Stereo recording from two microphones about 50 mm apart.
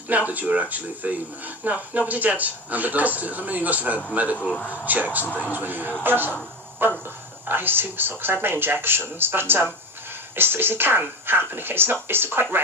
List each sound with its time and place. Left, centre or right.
0.1 s speech: right